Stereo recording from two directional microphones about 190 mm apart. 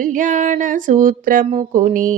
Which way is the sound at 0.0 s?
40° right (ahead or behind).